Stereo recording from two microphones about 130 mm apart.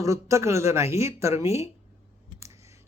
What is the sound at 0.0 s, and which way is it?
Speech, 25° right (ahead or behind).